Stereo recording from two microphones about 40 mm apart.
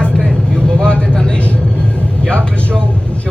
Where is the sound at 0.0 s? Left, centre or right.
Left.